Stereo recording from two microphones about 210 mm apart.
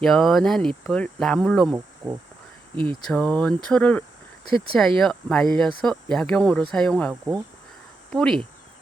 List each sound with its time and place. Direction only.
0.0 s speech: centre (ahead or behind)
2.7 s speech: 25° right (ahead or behind)
3.1 s speech: 5° left (ahead or behind)